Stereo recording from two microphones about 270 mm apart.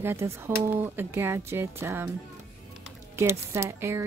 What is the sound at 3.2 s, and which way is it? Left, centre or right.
Speech, centre.